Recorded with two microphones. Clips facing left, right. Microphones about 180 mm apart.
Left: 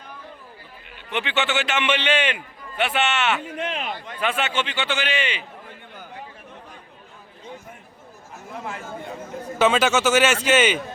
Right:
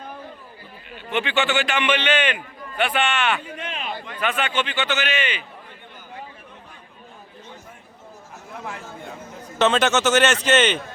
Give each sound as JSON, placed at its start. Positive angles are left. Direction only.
{"t": 1.1, "sound": "a man's voice", "side_deg": 20}
{"t": 9.6, "sound": "speech", "side_deg": 10}